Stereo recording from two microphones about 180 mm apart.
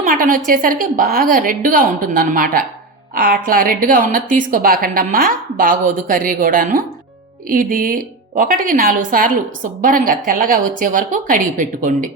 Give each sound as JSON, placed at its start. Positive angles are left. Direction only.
{"t": 0.0, "sound": "a woman's voice", "side_deg": -50}